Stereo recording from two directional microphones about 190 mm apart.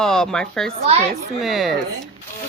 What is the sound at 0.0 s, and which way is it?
A woman's voice, 5° left (ahead or behind).